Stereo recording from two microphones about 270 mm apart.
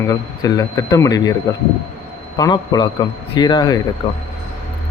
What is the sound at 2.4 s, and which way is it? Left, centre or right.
A man's voice, centre.